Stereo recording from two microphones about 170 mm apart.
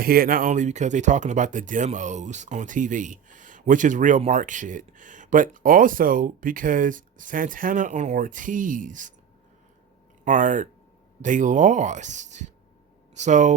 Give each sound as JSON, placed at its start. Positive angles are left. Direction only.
{"t": 0.0, "sound": "speech", "side_deg": -60}
{"t": 10.2, "sound": "speech", "side_deg": -50}